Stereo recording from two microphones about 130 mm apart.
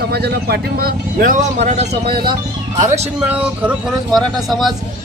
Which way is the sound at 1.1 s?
85° right.